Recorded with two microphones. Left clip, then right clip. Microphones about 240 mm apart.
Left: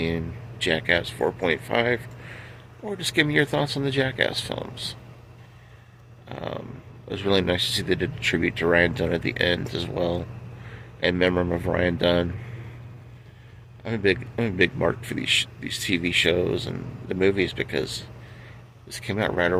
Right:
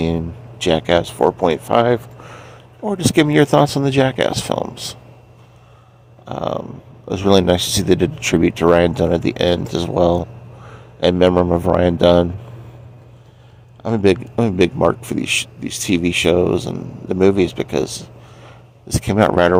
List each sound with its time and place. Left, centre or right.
0.0 s speech: right
6.2 s speech: right
13.8 s speech: right